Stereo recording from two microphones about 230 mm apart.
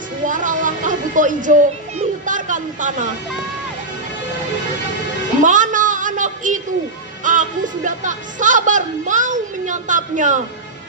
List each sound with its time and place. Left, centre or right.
0.2 s a sound: right
5.4 s music: right
7.2 s speech: right